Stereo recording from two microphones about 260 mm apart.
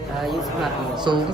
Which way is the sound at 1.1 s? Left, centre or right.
Centre.